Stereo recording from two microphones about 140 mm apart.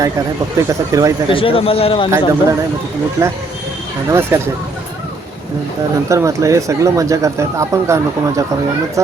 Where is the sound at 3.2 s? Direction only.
15° right (ahead or behind).